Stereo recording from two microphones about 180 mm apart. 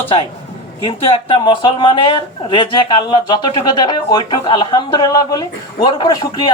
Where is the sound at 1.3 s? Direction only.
25° left (ahead or behind).